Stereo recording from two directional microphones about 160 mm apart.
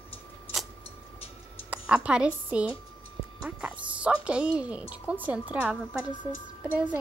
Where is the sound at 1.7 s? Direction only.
5° right (ahead or behind).